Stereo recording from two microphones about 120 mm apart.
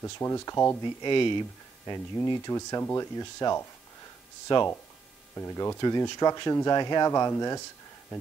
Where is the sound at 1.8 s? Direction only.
30° left (ahead or behind).